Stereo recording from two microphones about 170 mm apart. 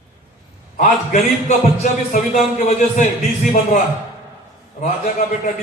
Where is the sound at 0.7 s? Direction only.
45° left (ahead or behind).